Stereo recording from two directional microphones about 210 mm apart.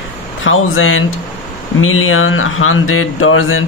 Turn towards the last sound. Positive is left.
turn(degrees=75)  # may be behind; listen again after turning